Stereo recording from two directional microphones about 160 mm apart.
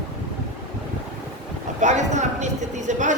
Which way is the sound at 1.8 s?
45° right (ahead or behind).